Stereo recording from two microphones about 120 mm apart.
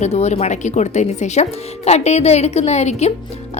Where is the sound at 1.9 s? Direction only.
65° left (ahead or behind).